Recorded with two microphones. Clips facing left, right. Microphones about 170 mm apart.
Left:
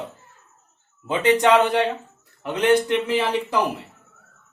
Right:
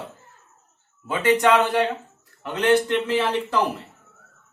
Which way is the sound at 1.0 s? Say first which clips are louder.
Left 1 dB; 20° left (ahead or behind).